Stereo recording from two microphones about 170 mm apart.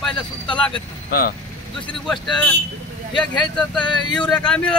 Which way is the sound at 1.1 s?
60° left (ahead or behind).